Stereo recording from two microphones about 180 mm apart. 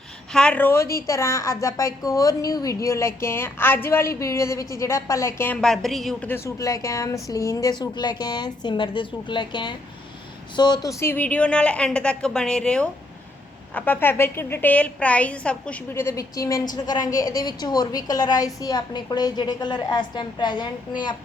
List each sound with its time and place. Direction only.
0.3 s a woman's voice: 5° left (ahead or behind)
6.3 s a woman's voice: 15° left (ahead or behind)